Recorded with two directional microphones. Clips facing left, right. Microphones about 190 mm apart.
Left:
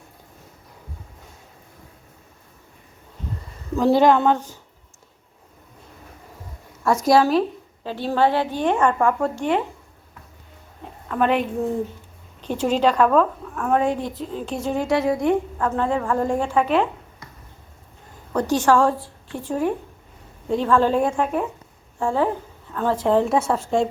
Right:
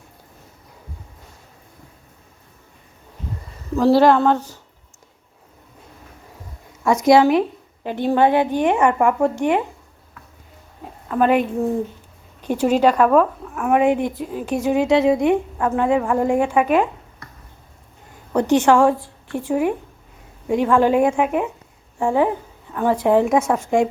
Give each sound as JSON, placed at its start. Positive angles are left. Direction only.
{"t": 3.8, "sound": "a woman's voice", "side_deg": -5}
{"t": 7.0, "sound": "a woman's voice", "side_deg": -20}
{"t": 11.1, "sound": "a woman's voice", "side_deg": -5}
{"t": 18.3, "sound": "a woman's voice", "side_deg": -20}